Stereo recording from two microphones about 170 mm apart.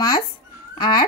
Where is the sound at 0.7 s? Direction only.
25° left (ahead or behind).